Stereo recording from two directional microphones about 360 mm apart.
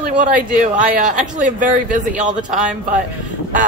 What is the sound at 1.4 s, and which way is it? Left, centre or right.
Speech, right.